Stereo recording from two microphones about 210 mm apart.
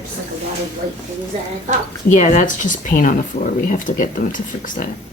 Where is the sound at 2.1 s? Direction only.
35° left (ahead or behind).